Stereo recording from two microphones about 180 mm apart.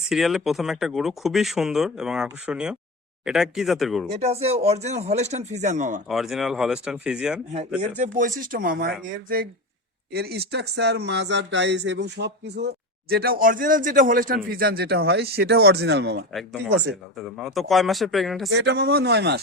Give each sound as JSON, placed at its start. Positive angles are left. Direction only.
{"t": 0.1, "sound": "speech", "side_deg": 0}
{"t": 4.1, "sound": "speech", "side_deg": -35}
{"t": 6.1, "sound": "speech", "side_deg": 0}
{"t": 7.8, "sound": "speech", "side_deg": -40}
{"t": 10.1, "sound": "speech", "side_deg": -60}
{"t": 16.3, "sound": "speech", "side_deg": 0}
{"t": 16.6, "sound": "speech", "side_deg": -75}
{"t": 17.2, "sound": "speech", "side_deg": 0}
{"t": 18.5, "sound": "speech", "side_deg": -70}